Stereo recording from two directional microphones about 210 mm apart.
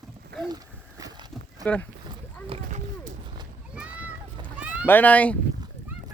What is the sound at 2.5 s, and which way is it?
Run, 30° right (ahead or behind).